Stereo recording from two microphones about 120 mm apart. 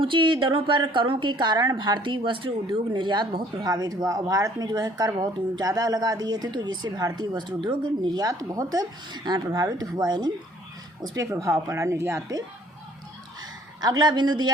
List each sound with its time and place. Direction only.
0.0 s a woman's voice: 45° right (ahead or behind); by 12.4 s 25° right (ahead or behind)
13.4 s a woman's voice: 35° right (ahead or behind)